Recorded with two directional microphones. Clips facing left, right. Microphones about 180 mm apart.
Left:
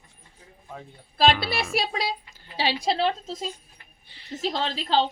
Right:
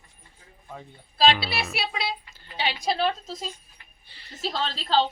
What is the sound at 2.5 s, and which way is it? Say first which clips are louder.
A woman's voice: left 2 dB; 30° left (ahead or behind).